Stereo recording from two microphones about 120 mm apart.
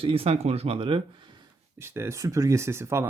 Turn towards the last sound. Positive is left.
turn(degrees=-20)  # may be behind; listen again after turning